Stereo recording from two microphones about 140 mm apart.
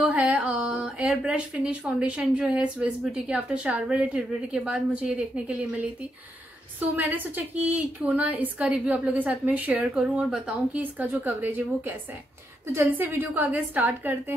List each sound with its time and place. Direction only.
0.0 s speech: 10° right (ahead or behind)
7.0 s speech: 10° right (ahead or behind)